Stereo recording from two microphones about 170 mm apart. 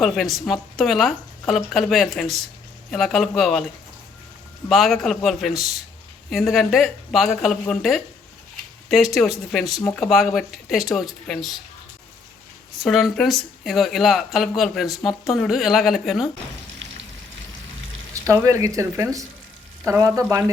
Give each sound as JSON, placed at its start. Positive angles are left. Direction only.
{"t": 0.0, "sound": "speech", "side_deg": 0}
{"t": 4.7, "sound": "speech", "side_deg": 0}
{"t": 12.8, "sound": "speech", "side_deg": 0}
{"t": 18.1, "sound": "speech", "side_deg": -20}